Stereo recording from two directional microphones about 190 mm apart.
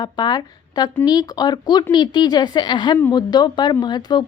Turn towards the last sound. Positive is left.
turn(degrees=20)  # may be behind; listen again after turning